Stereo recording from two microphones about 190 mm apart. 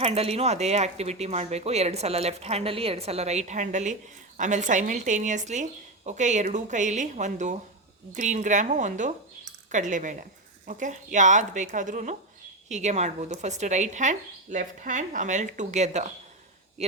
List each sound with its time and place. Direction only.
0.0 s speech: 30° right (ahead or behind)